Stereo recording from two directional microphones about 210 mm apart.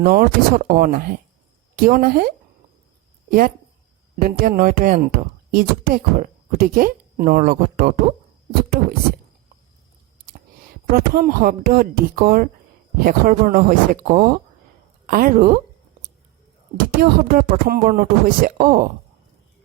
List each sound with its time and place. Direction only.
0.0 s a woman's voice: 40° right (ahead or behind)
10.9 s a woman's voice: 45° right (ahead or behind)
15.0 s a woman's voice: 40° right (ahead or behind)
16.7 s speech: 40° right (ahead or behind)